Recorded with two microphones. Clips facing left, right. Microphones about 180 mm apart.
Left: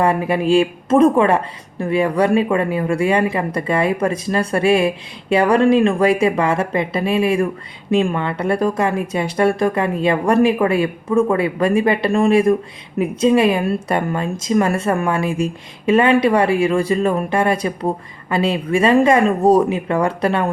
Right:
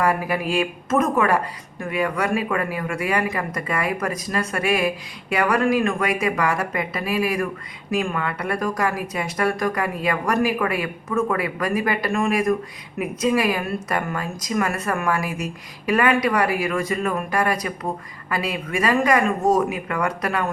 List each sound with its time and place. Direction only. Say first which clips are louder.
0.0 s speech: left 5 dB; 25° left (ahead or behind)